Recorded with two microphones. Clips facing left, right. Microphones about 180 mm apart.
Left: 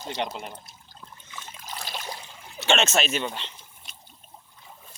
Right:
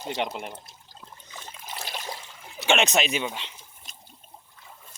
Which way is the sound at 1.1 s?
40° right (ahead or behind).